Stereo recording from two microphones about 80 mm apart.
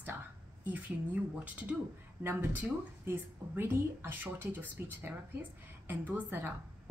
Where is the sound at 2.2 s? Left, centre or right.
Right.